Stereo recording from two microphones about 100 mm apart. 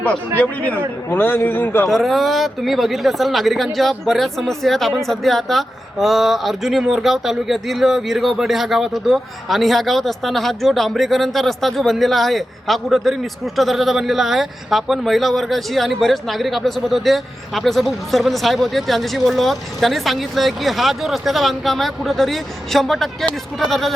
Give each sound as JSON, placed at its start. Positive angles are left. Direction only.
{"t": 0.3, "sound": "a man's voice", "side_deg": 15}
{"t": 1.9, "sound": "speech", "side_deg": 0}